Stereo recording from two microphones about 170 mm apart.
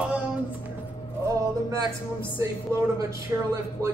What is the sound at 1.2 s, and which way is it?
Speech, 20° right (ahead or behind).